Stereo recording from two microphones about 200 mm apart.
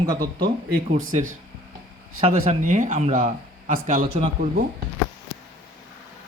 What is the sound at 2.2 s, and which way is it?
Speech, 30° right (ahead or behind).